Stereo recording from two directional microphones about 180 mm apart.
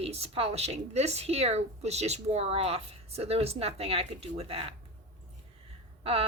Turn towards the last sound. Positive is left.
turn(degrees=-35)  # may be behind; listen again after turning